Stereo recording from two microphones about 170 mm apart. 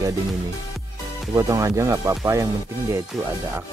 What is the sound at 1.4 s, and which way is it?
Speech, 20° right (ahead or behind).